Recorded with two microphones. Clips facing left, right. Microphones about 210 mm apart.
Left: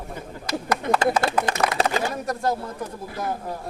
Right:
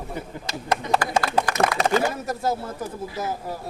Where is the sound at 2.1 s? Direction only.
5° right (ahead or behind).